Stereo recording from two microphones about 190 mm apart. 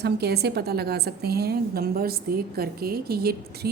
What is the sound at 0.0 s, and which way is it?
A woman's voice, 60° right (ahead or behind).